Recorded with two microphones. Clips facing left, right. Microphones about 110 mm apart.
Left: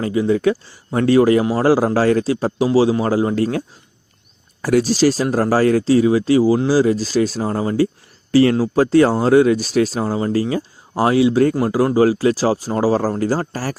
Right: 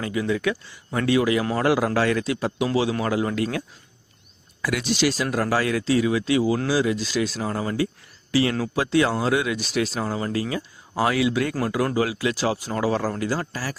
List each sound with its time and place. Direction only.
0.0 s speech: 30° left (ahead or behind)
4.6 s speech: 40° left (ahead or behind)